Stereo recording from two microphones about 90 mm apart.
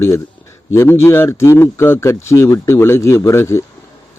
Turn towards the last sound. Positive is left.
turn(degrees=30)  # may be behind; listen again after turning